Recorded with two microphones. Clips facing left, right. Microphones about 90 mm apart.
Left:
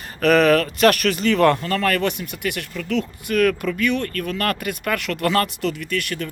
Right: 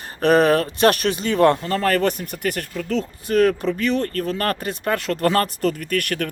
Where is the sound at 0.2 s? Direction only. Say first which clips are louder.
Even; 30° right (ahead or behind).